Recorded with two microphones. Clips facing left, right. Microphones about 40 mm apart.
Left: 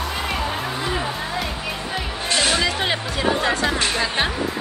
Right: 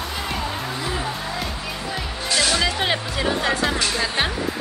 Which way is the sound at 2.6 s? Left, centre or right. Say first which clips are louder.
Even; centre.